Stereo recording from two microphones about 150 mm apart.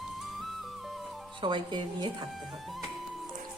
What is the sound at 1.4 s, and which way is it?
Speech, 30° right (ahead or behind).